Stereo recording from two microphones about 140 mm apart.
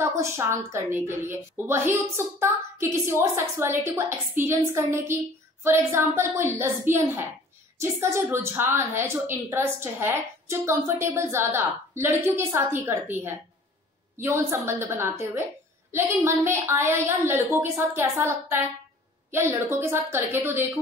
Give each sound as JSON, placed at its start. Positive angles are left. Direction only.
{"t": 0.0, "sound": "a woman's voice", "side_deg": -20}